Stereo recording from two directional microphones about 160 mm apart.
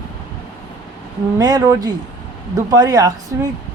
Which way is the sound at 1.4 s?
25° right (ahead or behind).